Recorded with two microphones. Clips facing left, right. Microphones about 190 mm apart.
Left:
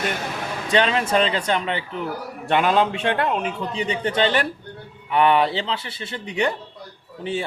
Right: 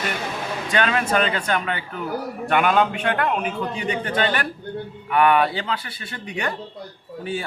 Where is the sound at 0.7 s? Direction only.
25° left (ahead or behind).